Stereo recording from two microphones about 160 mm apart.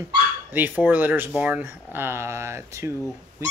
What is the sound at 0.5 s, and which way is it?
Speech, 10° right (ahead or behind).